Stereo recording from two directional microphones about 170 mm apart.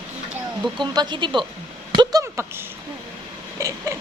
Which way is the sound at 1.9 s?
25° right (ahead or behind).